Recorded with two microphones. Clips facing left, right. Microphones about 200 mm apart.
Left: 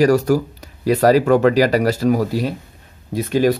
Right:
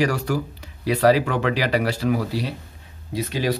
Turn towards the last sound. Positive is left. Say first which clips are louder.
# left 8 dB
turn(degrees=50)  # may be behind; listen again after turning